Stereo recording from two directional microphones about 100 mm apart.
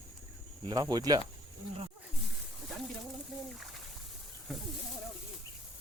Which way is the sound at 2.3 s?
Centre (ahead or behind).